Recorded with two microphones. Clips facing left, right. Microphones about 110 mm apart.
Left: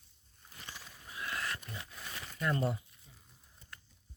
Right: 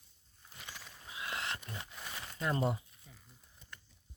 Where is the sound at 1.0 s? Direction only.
20° right (ahead or behind).